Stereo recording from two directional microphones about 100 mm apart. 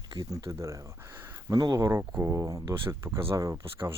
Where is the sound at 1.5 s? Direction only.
40° right (ahead or behind).